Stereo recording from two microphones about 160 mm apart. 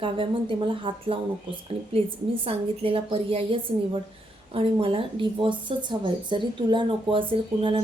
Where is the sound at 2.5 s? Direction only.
35° right (ahead or behind).